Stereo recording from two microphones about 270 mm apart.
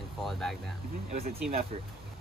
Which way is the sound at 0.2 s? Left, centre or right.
Centre.